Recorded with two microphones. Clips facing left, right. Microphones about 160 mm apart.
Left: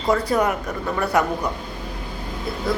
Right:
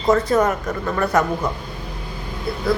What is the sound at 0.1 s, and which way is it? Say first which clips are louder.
Speech: right 3 dB; 15° left (ahead or behind).